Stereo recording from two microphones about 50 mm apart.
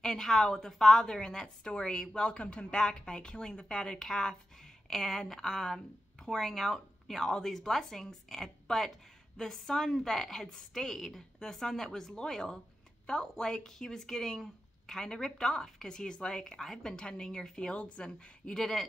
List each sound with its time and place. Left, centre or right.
0.0 s a woman's voice: centre
18.6 s speech: centre